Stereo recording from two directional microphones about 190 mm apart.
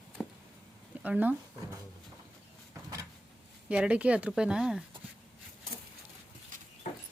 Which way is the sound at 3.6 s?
5° right (ahead or behind).